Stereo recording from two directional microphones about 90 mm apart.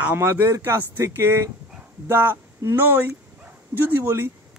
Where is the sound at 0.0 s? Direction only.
25° right (ahead or behind).